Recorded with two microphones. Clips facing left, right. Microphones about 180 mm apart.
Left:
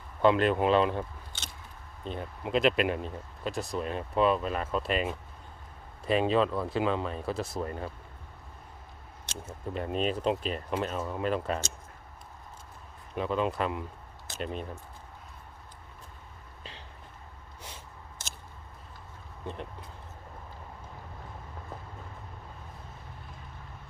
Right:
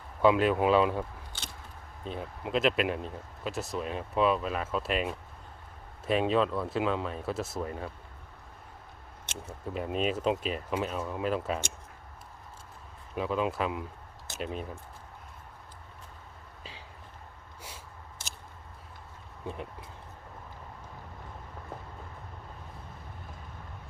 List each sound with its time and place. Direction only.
0.2 s speech: 5° right (ahead or behind)
9.6 s speech: 5° right (ahead or behind)
13.1 s speech: 5° right (ahead or behind)